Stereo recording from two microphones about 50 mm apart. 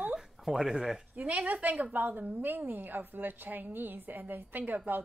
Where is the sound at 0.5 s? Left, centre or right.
Centre.